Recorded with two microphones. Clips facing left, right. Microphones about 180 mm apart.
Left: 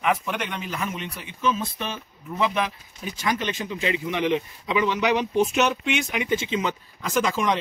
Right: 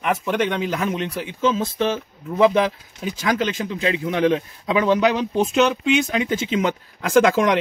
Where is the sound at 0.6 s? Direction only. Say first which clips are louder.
Right 7 dB; 90° right.